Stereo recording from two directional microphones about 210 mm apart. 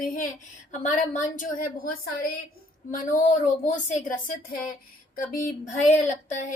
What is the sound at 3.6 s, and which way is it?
A woman's voice, 35° left (ahead or behind).